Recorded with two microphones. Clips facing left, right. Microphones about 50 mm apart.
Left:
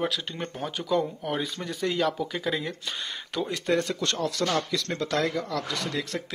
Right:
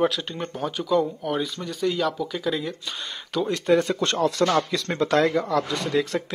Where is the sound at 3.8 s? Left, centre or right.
Right.